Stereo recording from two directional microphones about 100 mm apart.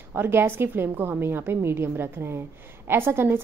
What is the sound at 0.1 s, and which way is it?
A woman's voice, 20° right (ahead or behind).